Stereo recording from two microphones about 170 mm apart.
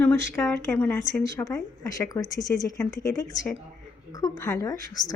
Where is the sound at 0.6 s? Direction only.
10° left (ahead or behind).